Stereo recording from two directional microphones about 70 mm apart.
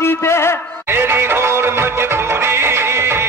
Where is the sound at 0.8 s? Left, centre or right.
Right.